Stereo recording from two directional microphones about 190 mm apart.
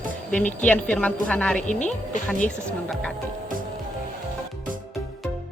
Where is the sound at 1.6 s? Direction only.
40° left (ahead or behind).